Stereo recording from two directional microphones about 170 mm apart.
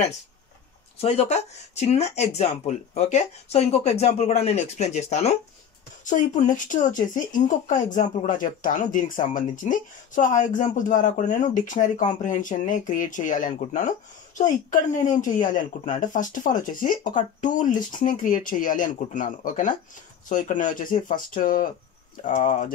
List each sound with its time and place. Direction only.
1.0 s speech: 40° left (ahead or behind)